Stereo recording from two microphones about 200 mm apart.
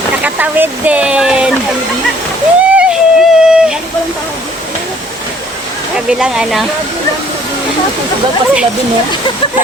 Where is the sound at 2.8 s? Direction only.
5° right (ahead or behind).